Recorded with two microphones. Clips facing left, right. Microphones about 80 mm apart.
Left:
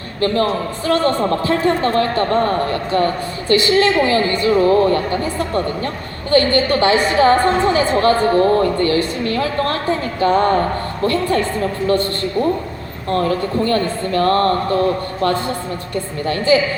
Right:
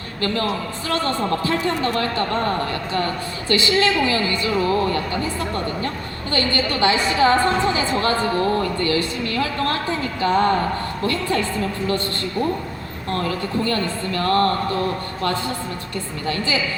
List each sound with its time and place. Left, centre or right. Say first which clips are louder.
0.2 s a woman's voice: left 6 dB; left